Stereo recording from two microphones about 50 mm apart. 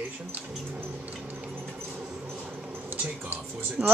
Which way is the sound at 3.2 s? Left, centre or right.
Right.